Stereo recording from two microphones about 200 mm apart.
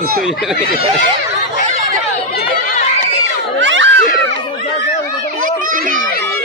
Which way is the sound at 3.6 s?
65° right (ahead or behind).